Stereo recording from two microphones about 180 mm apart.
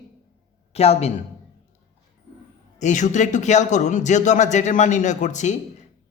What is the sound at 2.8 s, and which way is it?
Speech, 40° left (ahead or behind).